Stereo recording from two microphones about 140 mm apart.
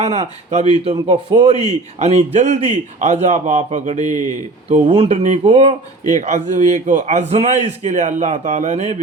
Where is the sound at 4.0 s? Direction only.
25° left (ahead or behind).